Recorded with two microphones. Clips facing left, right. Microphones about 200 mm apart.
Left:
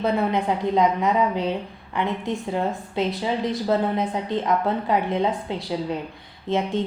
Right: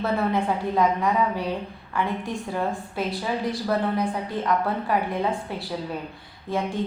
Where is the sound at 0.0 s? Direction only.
20° left (ahead or behind).